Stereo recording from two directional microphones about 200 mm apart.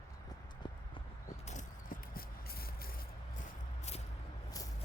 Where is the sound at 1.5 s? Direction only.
40° left (ahead or behind).